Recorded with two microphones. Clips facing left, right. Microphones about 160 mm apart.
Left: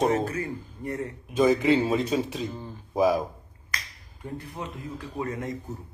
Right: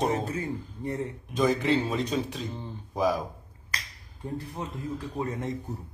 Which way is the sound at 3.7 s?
35° right (ahead or behind).